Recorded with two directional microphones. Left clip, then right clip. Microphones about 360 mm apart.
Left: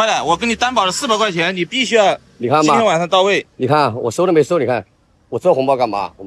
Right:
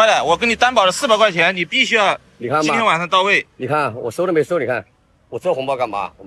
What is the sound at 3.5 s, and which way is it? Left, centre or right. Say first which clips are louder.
A man's voice: left 5 dB; centre.